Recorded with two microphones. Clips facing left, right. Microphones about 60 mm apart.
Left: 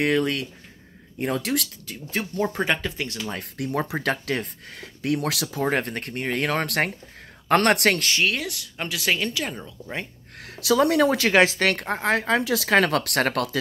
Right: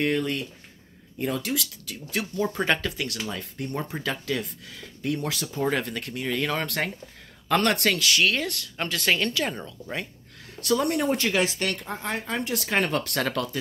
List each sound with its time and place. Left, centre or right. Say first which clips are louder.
0.0 s speech: left 3 dB; left
1.1 s speech: left 3 dB; left
1.9 s speech: right 1 dB; left
2.6 s speech: right 1 dB; centre
3.5 s speech: left 8 dB; left
5.0 s speech: left 4 dB; left
5.6 s speech: left 1 dB; left
8.4 s speech: right 1 dB; centre
10.4 s speech: left 4 dB; left